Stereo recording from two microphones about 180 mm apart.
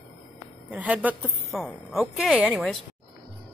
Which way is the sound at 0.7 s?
5° right (ahead or behind).